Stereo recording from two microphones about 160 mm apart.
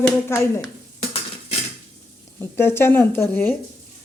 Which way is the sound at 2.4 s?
15° left (ahead or behind).